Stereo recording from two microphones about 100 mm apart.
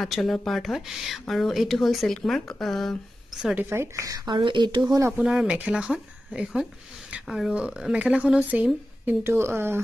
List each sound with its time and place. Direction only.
0.0 s speech: centre (ahead or behind)
3.5 s speech: 25° right (ahead or behind)
4.3 s speech: 50° right (ahead or behind)
4.8 s speech: 35° right (ahead or behind)
5.2 s speech: 5° right (ahead or behind)
9.0 s speech: 25° right (ahead or behind)